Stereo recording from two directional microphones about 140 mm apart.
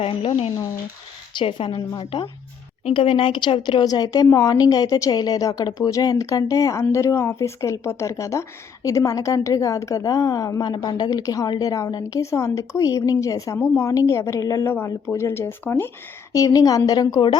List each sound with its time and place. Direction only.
0.0 s a woman's voice: 40° left (ahead or behind)